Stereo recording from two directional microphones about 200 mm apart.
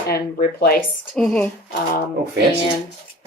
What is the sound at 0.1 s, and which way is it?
Speech, 50° left (ahead or behind).